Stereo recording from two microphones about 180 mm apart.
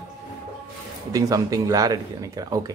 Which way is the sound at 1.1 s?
20° right (ahead or behind).